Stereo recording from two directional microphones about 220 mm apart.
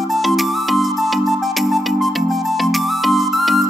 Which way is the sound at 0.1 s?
Centre (ahead or behind).